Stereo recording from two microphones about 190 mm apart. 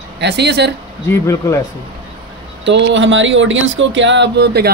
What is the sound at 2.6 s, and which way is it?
Speech, 70° right (ahead or behind).